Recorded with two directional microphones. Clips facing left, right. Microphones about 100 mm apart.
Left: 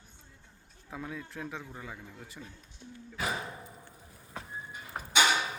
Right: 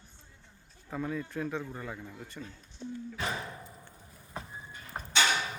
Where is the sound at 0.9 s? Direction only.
Centre (ahead or behind).